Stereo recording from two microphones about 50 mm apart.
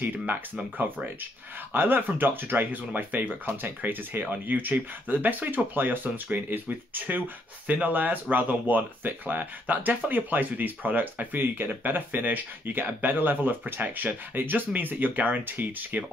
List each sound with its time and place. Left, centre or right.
0.7 s speech: right